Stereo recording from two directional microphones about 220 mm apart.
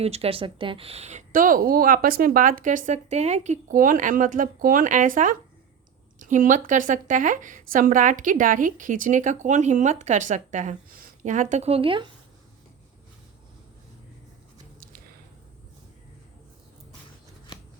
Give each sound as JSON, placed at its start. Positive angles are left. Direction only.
{"t": 0.0, "sound": "a woman's voice", "side_deg": -25}